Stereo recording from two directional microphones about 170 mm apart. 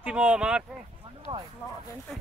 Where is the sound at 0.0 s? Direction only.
10° right (ahead or behind).